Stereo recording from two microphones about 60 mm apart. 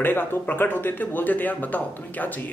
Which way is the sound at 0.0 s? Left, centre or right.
Left.